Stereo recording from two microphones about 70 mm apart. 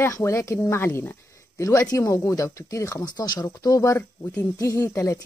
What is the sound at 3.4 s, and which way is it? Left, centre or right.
Speech, left.